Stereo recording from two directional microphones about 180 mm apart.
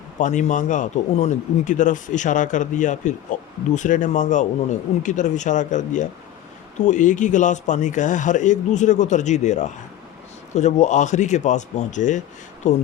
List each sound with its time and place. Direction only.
0.2 s a man's voice: 45° left (ahead or behind)